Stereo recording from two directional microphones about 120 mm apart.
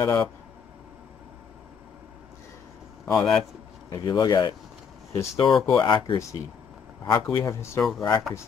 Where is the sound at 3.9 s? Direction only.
35° left (ahead or behind).